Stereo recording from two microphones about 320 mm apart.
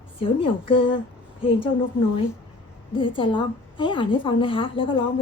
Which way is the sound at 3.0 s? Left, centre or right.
Centre.